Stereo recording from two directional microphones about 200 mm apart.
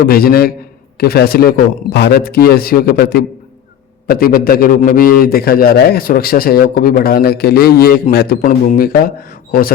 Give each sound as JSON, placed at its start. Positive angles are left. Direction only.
{"t": 0.0, "sound": "a man's voice", "side_deg": 50}